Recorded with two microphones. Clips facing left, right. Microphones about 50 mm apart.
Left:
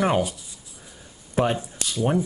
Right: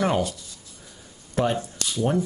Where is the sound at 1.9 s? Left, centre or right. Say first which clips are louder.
Left 1 dB; centre.